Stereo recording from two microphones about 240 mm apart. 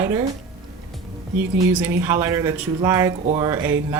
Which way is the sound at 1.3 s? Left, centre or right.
Centre.